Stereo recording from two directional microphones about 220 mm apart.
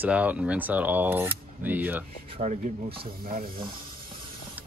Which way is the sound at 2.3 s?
30° right (ahead or behind).